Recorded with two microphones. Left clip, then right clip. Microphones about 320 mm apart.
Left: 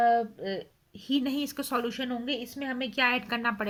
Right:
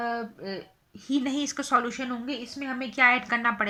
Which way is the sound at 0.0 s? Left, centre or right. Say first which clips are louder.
Left 7 dB; left.